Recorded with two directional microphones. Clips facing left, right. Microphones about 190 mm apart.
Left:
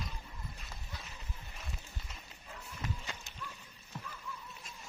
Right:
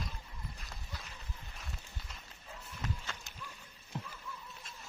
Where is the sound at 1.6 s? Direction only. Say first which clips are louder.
Left 1 dB; centre (ahead or behind).